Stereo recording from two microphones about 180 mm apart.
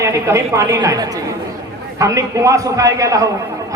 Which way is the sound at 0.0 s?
15° right (ahead or behind).